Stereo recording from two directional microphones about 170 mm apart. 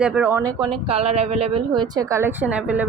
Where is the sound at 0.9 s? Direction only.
35° right (ahead or behind).